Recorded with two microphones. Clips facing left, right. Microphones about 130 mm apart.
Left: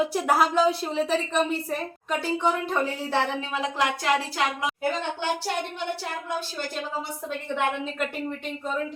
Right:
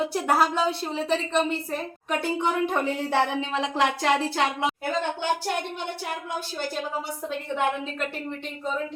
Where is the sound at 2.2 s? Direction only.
15° right (ahead or behind).